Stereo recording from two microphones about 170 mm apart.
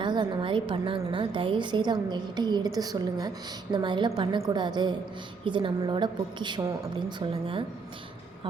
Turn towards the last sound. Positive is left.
turn(degrees=-30)  # may be behind; listen again after turning